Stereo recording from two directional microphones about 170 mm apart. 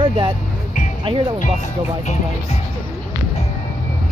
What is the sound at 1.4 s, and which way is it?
Speech, 45° left (ahead or behind).